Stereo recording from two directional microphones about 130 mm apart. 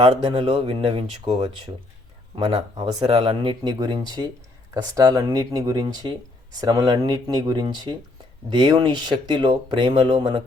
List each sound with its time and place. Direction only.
0.0 s speech: 40° right (ahead or behind)
2.3 s speech: 35° right (ahead or behind)